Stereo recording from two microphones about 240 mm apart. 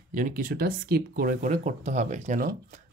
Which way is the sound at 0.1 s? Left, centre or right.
Right.